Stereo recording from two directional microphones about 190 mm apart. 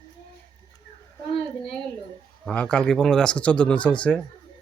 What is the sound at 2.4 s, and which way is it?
Speech, 5° left (ahead or behind).